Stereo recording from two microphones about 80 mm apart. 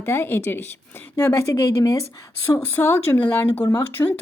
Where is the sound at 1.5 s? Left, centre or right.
Left.